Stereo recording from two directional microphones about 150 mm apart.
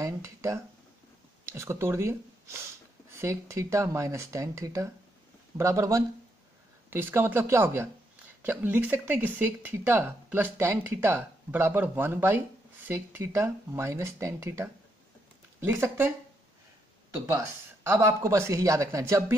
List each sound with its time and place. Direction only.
0.0 s a sound: 20° right (ahead or behind)
1.5 s speech: 15° right (ahead or behind)
17.8 s speech: 15° right (ahead or behind)